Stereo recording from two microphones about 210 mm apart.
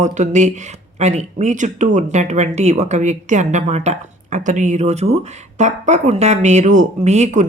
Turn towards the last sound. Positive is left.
turn(degrees=-35)  # may be behind; listen again after turning